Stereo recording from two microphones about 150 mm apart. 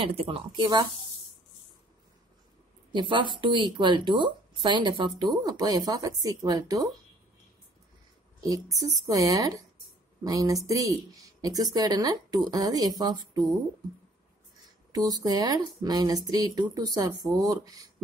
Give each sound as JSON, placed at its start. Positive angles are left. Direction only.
{"t": 0.0, "sound": "a woman's voice", "side_deg": -40}
{"t": 2.9, "sound": "a woman's voice", "side_deg": -35}
{"t": 8.4, "sound": "speech", "side_deg": -25}
{"t": 14.9, "sound": "speech", "side_deg": -25}